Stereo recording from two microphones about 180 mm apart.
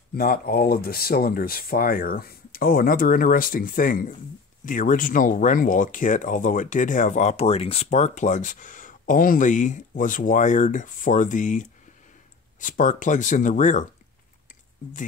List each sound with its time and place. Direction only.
0.1 s speech: 55° left (ahead or behind)